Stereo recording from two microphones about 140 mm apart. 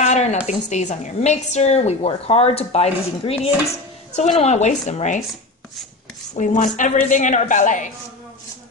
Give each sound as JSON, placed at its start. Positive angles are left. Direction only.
{"t": 0.0, "sound": "a sound", "side_deg": 55}
{"t": 0.5, "sound": "a woman's voice", "side_deg": 55}
{"t": 6.3, "sound": "a woman's voice", "side_deg": 55}